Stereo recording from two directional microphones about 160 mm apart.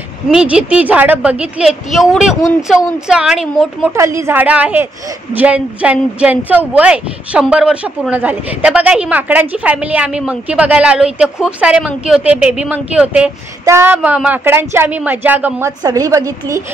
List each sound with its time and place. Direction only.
0.3 s a woman's voice: 5° right (ahead or behind)
3.9 s a woman's voice: 20° right (ahead or behind)
15.8 s a woman's voice: 20° right (ahead or behind)